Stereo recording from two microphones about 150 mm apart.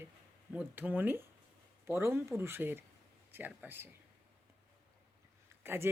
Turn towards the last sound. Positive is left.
turn(degrees=-15)  # may be behind; listen again after turning